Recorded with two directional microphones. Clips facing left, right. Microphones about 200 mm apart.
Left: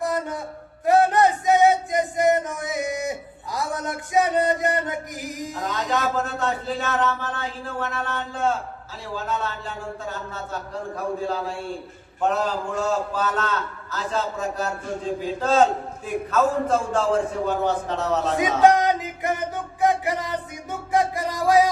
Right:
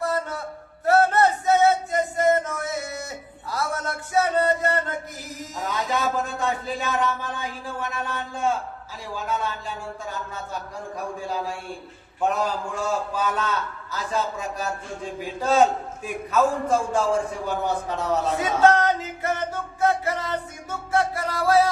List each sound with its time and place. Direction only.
0.0 s a sound: 15° left (ahead or behind)
0.9 s male singing: 15° left (ahead or behind)
5.7 s a man's voice: 10° right (ahead or behind)
18.3 s music: 15° left (ahead or behind)